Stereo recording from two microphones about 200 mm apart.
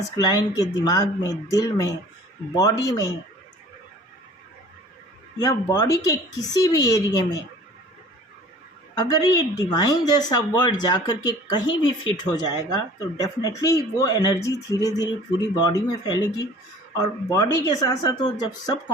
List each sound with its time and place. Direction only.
0.2 s speech: 20° left (ahead or behind)
5.4 s speech: 15° left (ahead or behind)
9.0 s speech: 20° left (ahead or behind)